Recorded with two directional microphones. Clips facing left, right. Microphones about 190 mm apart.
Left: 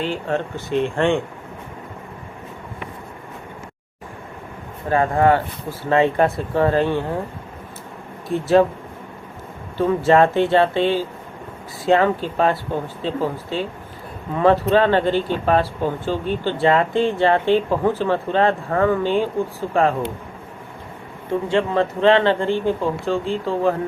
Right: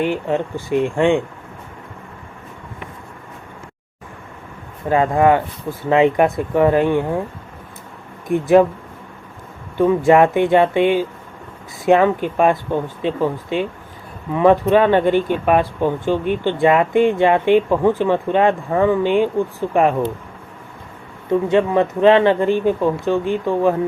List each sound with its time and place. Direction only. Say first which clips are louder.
0.0 s speech: right 4 dB; 15° right (ahead or behind)
4.9 s speech: right 2 dB; 15° right (ahead or behind)
8.3 s speech: right 3 dB; 15° right (ahead or behind)
9.7 s speech: right 3 dB; 15° right (ahead or behind)
21.5 s speech: right 2 dB; 15° right (ahead or behind)